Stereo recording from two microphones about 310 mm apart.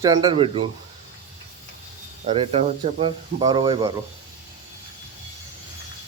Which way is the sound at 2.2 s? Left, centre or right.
Centre.